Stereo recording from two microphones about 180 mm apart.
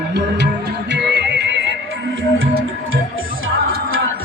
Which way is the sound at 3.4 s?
90° right.